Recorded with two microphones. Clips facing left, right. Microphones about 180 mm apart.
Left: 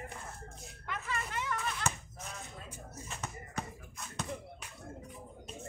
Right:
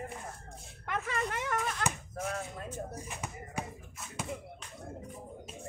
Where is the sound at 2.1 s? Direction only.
55° right (ahead or behind).